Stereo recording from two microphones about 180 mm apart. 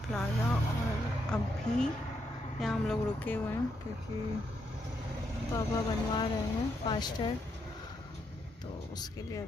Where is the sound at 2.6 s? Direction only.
Centre (ahead or behind).